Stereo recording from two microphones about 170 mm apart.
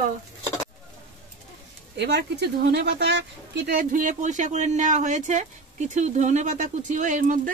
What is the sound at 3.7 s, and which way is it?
Speech, 50° right (ahead or behind).